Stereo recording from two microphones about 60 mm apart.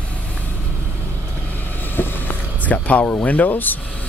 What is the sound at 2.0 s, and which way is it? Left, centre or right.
Vehicle, left.